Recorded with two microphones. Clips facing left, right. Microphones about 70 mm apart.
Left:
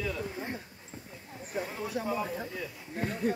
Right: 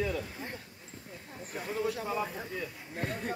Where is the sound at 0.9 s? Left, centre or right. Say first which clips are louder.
Left 3 dB; left.